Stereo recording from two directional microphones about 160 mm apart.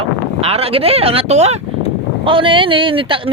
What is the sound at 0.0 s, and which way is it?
Speech, 35° right (ahead or behind).